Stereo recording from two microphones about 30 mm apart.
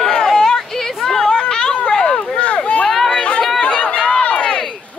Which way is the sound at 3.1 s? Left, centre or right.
Left.